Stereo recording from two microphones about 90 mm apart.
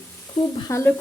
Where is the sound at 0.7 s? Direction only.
35° left (ahead or behind).